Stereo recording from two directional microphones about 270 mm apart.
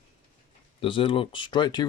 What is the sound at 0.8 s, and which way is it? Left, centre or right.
Speech, centre.